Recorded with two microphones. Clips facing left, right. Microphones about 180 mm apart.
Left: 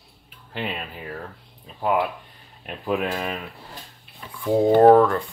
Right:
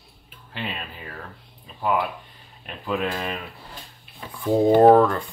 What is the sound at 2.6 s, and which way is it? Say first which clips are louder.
Speech: left 2 dB; 10° left (ahead or behind).